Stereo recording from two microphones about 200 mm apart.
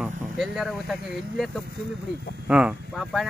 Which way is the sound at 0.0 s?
Centre (ahead or behind).